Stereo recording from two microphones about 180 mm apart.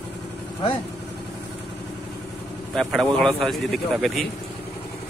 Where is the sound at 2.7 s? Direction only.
5° left (ahead or behind).